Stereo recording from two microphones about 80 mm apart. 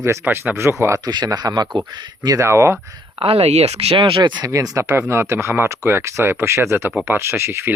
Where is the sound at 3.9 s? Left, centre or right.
Right.